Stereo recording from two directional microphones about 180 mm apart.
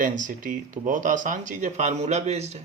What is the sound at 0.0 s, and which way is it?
A man's voice, 45° right (ahead or behind).